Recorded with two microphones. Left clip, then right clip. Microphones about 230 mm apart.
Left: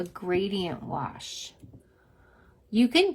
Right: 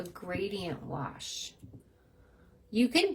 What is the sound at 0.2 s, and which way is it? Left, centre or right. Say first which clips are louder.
Speech: left 7 dB; left.